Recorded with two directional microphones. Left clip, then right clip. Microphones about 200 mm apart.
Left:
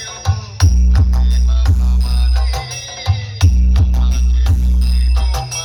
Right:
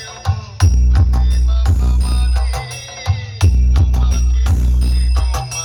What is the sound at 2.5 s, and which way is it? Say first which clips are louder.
Music: left 3 dB; 10° left (ahead or behind).